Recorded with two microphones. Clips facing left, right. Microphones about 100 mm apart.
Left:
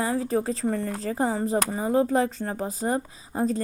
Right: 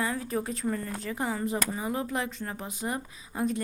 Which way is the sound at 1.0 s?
35° left (ahead or behind).